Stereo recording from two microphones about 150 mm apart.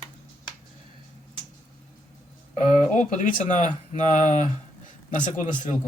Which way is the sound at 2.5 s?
50° left (ahead or behind).